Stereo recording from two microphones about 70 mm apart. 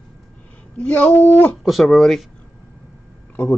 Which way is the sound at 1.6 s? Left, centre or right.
Centre.